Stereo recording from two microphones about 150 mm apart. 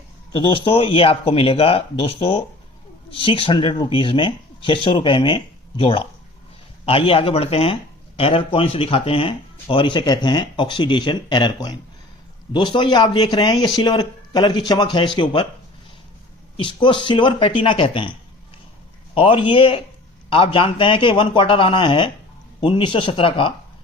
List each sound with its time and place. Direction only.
0.3 s speech: 35° left (ahead or behind)
16.6 s speech: 35° left (ahead or behind)
19.1 s speech: 35° left (ahead or behind)